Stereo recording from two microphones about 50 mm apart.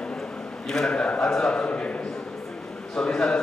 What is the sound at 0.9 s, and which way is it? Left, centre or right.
Speech, left.